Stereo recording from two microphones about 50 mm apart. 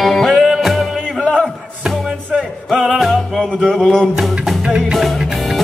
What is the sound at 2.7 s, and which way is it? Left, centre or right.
Music, centre.